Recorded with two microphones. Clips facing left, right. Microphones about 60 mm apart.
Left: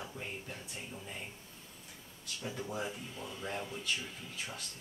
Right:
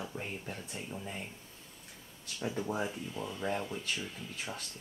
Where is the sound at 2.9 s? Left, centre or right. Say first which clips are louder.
Right 4 dB; centre.